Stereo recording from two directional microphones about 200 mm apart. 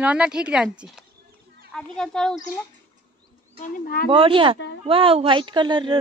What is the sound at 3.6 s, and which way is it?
Speech, 45° left (ahead or behind).